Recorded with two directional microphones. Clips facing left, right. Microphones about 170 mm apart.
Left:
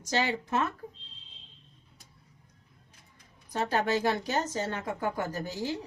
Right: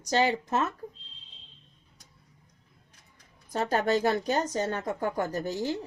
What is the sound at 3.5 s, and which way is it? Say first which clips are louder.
Speech: right 2 dB; 45° right (ahead or behind).